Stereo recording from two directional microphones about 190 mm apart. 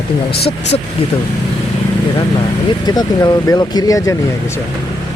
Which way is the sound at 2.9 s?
20° left (ahead or behind).